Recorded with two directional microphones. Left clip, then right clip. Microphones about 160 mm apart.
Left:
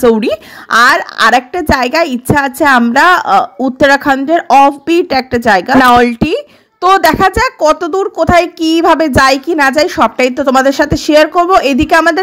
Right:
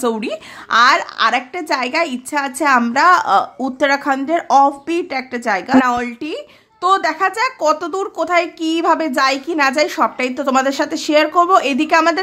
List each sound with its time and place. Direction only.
0.0 s a woman's voice: 35° left (ahead or behind)